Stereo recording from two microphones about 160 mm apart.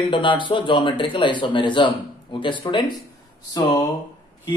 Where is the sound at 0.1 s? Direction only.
30° left (ahead or behind).